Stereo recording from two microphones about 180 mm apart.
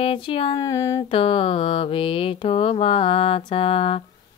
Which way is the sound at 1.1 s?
30° left (ahead or behind).